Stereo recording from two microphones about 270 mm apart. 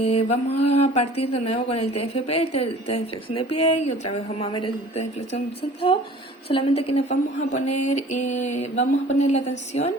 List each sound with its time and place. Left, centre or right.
0.0 s speech: left
6.5 s speech: left